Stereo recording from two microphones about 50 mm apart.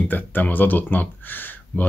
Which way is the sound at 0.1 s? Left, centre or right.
Left.